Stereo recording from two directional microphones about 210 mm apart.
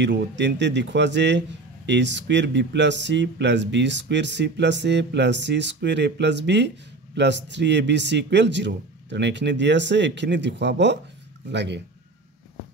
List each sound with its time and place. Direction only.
0.0 s speech: 55° right (ahead or behind)